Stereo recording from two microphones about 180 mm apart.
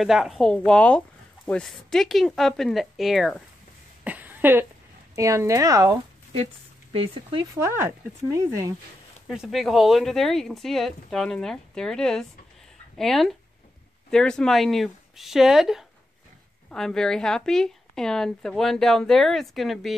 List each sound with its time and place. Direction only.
0.0 s speech: centre (ahead or behind)
4.0 s a sound: 10° right (ahead or behind)
5.1 s speech: 15° right (ahead or behind)
6.3 s speech: 35° right (ahead or behind)
7.5 s speech: 15° right (ahead or behind)
9.3 s speech: centre (ahead or behind)